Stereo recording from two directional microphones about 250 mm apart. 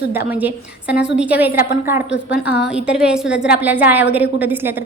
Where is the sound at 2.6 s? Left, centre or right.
Centre.